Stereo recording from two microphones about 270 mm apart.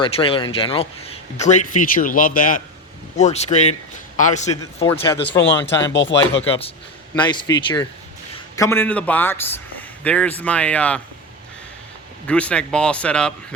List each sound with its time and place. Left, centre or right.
0.0 s speech: centre
5.4 s speech: left
6.5 s a man's voice: left; by 11.0 s centre
12.3 s speech: centre